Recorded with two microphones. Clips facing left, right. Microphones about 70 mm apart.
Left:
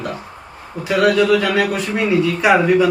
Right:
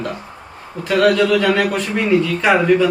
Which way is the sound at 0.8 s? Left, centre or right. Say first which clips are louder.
Even; centre.